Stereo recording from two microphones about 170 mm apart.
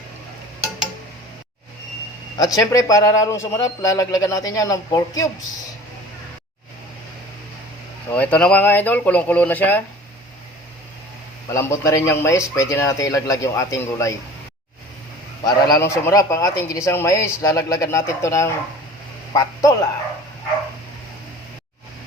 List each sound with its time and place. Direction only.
2.4 s a man's voice: 20° left (ahead or behind)
8.1 s speech: 10° left (ahead or behind)
11.5 s speech: 15° left (ahead or behind)
15.7 s speech: 15° left (ahead or behind)